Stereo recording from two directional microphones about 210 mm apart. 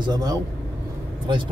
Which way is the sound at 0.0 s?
20° right (ahead or behind).